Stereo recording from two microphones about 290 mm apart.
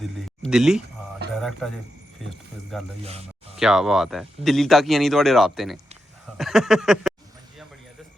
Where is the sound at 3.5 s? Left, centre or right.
Centre.